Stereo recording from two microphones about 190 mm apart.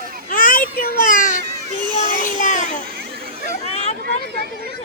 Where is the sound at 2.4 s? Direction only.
40° left (ahead or behind).